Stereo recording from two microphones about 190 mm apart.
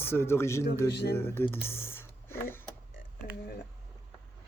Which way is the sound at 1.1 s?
10° left (ahead or behind).